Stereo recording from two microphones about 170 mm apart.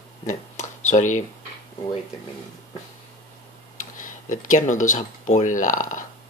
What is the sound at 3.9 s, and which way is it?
Speech, 50° left (ahead or behind).